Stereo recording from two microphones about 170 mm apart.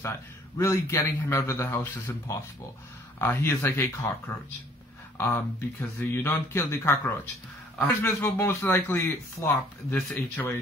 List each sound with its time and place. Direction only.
0.6 s speech: 15° left (ahead or behind)
5.1 s speech: 15° left (ahead or behind)